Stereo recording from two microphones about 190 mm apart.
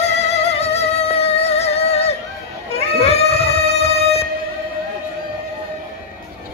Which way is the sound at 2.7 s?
35° left (ahead or behind).